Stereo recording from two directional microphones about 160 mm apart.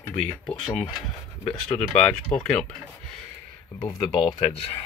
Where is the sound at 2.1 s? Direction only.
5° left (ahead or behind).